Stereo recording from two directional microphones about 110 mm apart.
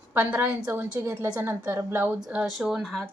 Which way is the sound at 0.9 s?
25° right (ahead or behind).